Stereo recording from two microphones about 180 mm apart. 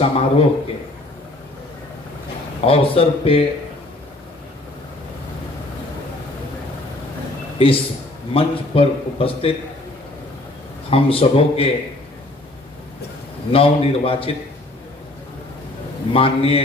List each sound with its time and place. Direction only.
0.0 s a man's voice: 30° left (ahead or behind)
2.6 s a man's voice: 30° left (ahead or behind)
8.3 s a man's voice: 30° left (ahead or behind)
10.9 s a man's voice: 30° left (ahead or behind)
13.5 s a man's voice: 30° left (ahead or behind)
16.1 s a man's voice: 30° left (ahead or behind)